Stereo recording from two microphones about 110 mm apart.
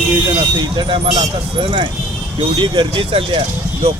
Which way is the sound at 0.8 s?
50° right (ahead or behind).